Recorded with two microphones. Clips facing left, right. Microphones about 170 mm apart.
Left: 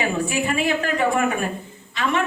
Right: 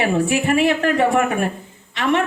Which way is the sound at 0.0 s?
65° right (ahead or behind).